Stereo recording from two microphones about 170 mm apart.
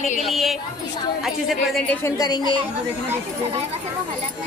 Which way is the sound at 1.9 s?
20° left (ahead or behind).